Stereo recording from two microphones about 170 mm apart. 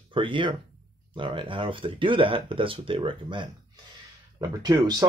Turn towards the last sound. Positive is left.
turn(degrees=-25)  # may be behind; listen again after turning